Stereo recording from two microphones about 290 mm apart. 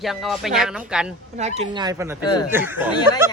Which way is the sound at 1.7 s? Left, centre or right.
Centre.